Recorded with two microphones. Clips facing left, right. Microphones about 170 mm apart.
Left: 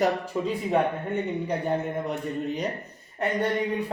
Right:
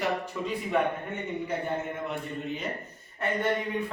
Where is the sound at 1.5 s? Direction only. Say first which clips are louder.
Left 4 dB; 40° left (ahead or behind).